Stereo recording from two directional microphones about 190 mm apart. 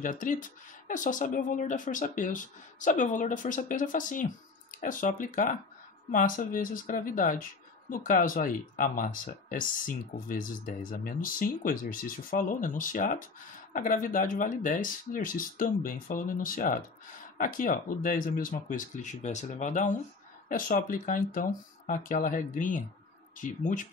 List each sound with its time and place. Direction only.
0.0 s speech: 45° left (ahead or behind)